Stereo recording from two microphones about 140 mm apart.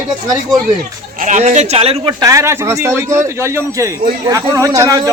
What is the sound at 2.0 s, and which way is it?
A man's voice, 20° right (ahead or behind).